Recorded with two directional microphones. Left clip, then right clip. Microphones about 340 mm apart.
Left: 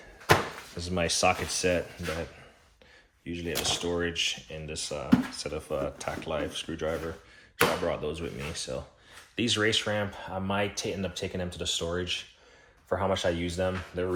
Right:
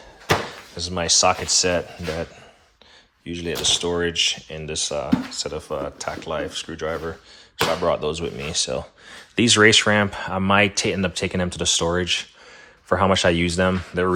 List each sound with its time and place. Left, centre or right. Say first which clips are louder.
0.8 s speech: right 8 dB; centre
3.2 s speech: right 8 dB; centre